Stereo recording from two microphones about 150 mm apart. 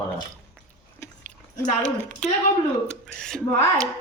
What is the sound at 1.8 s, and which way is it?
A woman's voice, 5° left (ahead or behind).